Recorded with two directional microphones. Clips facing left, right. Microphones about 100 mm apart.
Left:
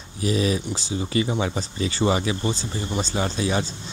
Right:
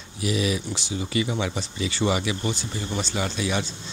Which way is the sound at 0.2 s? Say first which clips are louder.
Left 3 dB; 35° left (ahead or behind).